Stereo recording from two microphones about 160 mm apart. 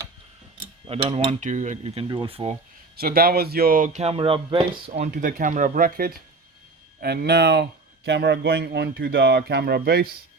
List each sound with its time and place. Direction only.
0.9 s cutlery: 40° right (ahead or behind)
2.0 s speech: 30° right (ahead or behind)
2.9 s a man's voice: 70° right (ahead or behind); by 4.6 s 30° right (ahead or behind)
4.9 s a man's voice: 55° right (ahead or behind)
7.0 s speech: 85° right